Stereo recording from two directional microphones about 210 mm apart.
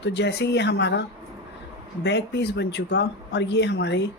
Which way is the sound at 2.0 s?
55° left (ahead or behind).